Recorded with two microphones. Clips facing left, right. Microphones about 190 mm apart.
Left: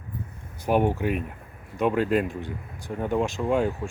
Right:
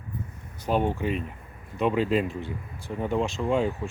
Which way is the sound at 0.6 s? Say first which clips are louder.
Left 3 dB; 15° left (ahead or behind).